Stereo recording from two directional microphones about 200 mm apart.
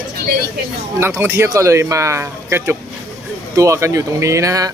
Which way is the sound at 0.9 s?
15° right (ahead or behind).